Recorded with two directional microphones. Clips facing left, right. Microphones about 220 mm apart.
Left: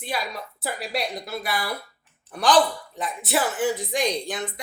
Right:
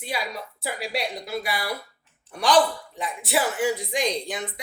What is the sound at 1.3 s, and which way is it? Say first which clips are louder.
Speech: even; 10° right (ahead or behind).